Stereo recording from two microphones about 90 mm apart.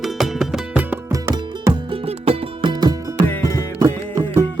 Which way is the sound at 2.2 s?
60° right (ahead or behind).